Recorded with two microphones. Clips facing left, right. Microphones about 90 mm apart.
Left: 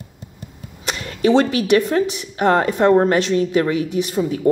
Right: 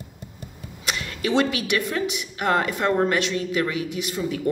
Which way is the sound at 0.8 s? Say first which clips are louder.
Left 8 dB; 35° left (ahead or behind).